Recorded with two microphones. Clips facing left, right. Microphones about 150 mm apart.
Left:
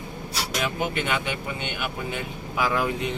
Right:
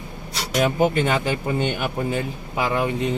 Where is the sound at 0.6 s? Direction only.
40° right (ahead or behind).